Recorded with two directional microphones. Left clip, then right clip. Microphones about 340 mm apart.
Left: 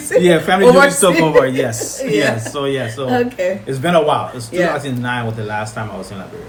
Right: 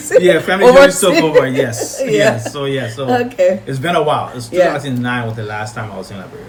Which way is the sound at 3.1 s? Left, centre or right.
Centre.